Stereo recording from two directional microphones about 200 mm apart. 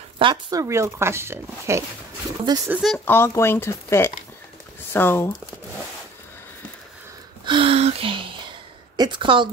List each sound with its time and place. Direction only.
0.2 s speech: 20° right (ahead or behind)
2.7 s speech: centre (ahead or behind)
3.1 s speech: 10° left (ahead or behind)
7.4 s speech: 25° right (ahead or behind)